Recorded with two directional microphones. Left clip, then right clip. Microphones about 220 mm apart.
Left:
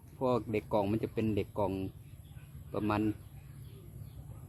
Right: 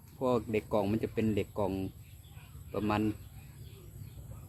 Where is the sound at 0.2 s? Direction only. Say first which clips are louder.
Right 1 dB; 25° left (ahead or behind).